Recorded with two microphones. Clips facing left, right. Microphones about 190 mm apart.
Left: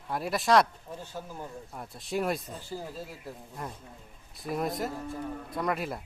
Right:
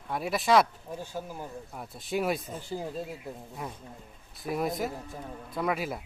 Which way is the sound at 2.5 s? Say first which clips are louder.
Right 3 dB; 15° right (ahead or behind).